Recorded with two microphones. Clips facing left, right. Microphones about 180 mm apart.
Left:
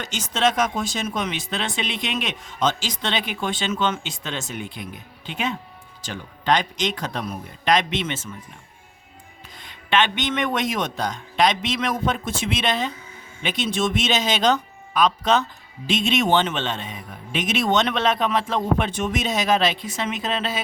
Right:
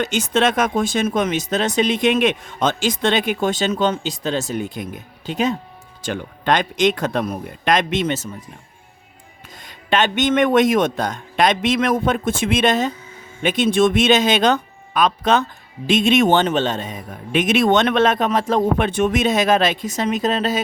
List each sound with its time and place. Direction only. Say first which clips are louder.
0.0 s speech: right 5 dB; 55° right (ahead or behind); by 5.5 s 40° right (ahead or behind)
6.0 s speech: right 8 dB; 55° right (ahead or behind)
9.6 s speech: right 2 dB; 40° right (ahead or behind)